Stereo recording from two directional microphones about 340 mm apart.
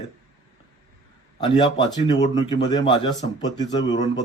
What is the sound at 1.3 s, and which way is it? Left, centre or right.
Speech, centre.